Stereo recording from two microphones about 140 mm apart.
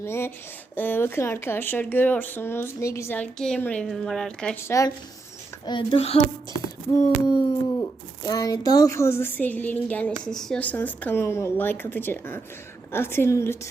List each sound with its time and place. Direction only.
0.0 s speech: 20° left (ahead or behind)
3.3 s a woman's voice: 5° left (ahead or behind)
5.6 s speech: 35° left (ahead or behind)
6.9 s speech: 30° left (ahead or behind)